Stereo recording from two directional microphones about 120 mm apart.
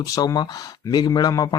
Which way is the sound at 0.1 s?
30° left (ahead or behind).